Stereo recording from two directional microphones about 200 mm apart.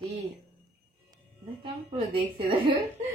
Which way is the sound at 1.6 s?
30° right (ahead or behind).